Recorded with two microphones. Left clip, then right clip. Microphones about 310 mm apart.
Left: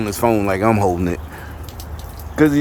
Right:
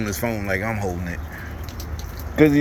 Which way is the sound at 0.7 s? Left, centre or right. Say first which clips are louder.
Left 10 dB; left.